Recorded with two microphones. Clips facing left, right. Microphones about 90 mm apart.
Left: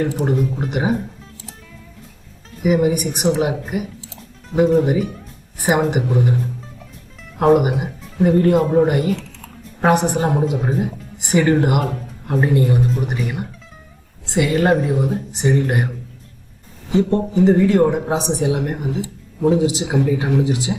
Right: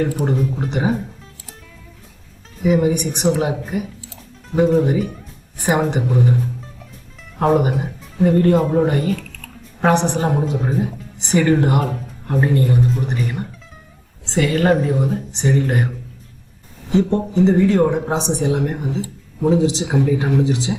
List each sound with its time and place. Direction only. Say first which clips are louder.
0.3 s a woman's voice: left 1 dB; centre (ahead or behind)
2.6 s a woman's voice: even; 5° left (ahead or behind)
12.4 s a woman's voice: even; 10° left (ahead or behind)
16.9 s a woman's voice: even; centre (ahead or behind)